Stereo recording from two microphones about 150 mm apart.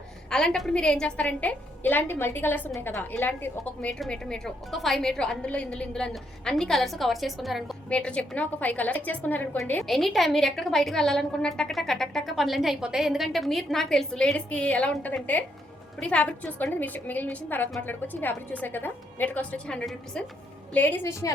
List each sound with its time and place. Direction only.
0.3 s a woman's voice: 5° left (ahead or behind); by 21.3 s 20° left (ahead or behind)